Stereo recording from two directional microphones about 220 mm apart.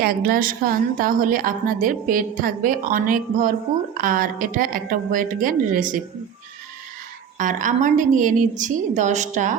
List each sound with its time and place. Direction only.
0.0 s a woman's voice: 40° right (ahead or behind)
7.3 s a woman's voice: 35° right (ahead or behind)